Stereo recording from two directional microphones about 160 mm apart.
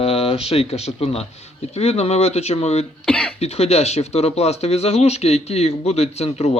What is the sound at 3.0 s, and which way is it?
Speech, 5° left (ahead or behind).